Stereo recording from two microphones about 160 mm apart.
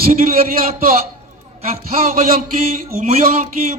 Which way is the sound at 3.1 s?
50° right (ahead or behind).